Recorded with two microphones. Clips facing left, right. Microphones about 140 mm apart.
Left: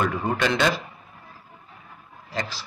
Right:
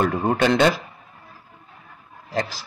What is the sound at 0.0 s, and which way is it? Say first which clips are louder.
Speech: right 4 dB; 50° right (ahead or behind).